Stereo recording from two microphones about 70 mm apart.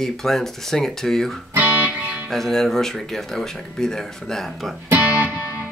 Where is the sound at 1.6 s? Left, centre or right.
Right.